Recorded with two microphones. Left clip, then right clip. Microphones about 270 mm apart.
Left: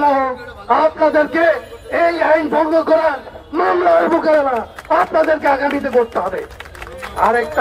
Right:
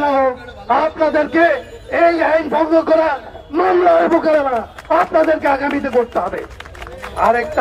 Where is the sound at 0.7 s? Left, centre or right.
Right.